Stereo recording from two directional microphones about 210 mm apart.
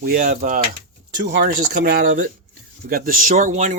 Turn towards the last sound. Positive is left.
turn(degrees=-35)  # may be behind; listen again after turning